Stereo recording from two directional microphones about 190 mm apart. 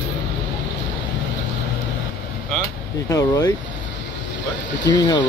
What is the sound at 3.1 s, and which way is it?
Speech, 20° left (ahead or behind).